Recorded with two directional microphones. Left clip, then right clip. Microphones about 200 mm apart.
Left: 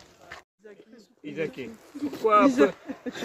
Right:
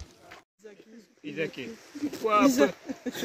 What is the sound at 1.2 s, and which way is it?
A man's voice, 25° left (ahead or behind).